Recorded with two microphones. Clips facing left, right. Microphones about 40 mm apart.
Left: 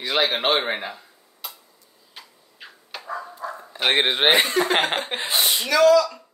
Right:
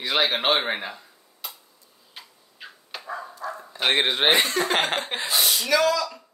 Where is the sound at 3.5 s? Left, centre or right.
Centre.